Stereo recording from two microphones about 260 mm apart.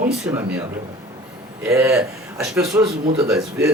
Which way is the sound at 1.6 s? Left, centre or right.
Centre.